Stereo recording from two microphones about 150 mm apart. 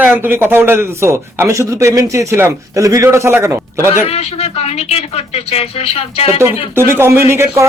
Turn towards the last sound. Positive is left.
turn(degrees=-15)  # may be behind; listen again after turning